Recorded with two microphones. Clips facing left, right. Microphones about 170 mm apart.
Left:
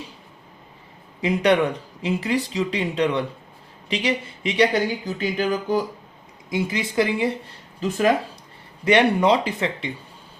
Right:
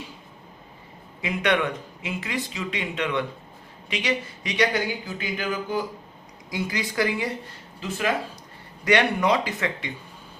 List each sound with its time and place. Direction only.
1.2 s speech: 35° left (ahead or behind)
6.5 s speech: 25° left (ahead or behind)
7.8 s speech: 45° left (ahead or behind)
8.8 s speech: 25° left (ahead or behind)